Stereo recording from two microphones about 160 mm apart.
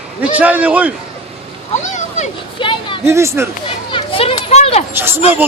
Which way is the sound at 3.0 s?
15° right (ahead or behind).